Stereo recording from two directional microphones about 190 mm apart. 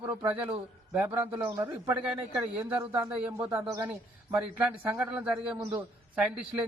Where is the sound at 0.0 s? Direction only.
20° right (ahead or behind).